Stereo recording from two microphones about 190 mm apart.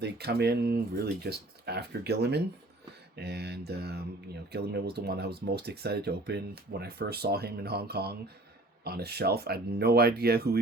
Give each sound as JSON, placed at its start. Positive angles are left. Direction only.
{"t": 0.0, "sound": "speech", "side_deg": -60}